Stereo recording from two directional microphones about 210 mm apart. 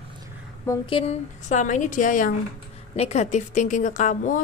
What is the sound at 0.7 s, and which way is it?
A woman's voice, 25° left (ahead or behind).